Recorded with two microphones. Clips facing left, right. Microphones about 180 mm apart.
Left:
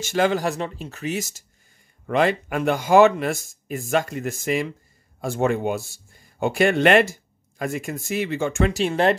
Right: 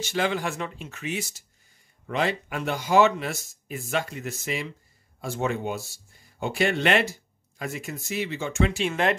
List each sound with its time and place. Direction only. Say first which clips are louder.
0.0 s speech: left 6 dB; 45° left (ahead or behind)
2.0 s speech: left 6 dB; 55° left (ahead or behind); by 9.1 s 35° left (ahead or behind)